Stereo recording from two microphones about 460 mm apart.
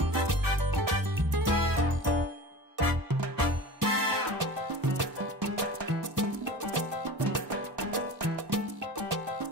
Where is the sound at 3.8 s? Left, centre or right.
Right.